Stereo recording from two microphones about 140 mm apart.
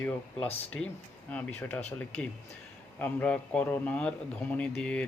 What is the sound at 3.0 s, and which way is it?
A man's voice, 10° left (ahead or behind).